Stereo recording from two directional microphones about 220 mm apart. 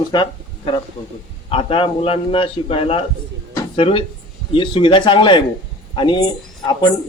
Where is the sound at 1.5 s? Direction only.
25° left (ahead or behind).